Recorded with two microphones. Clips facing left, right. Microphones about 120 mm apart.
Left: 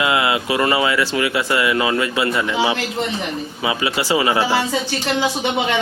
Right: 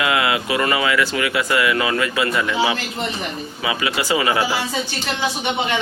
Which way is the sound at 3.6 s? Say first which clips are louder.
Left 1 dB; 25° left (ahead or behind).